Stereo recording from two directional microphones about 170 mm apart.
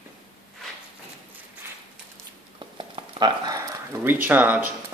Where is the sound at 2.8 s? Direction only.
30° right (ahead or behind).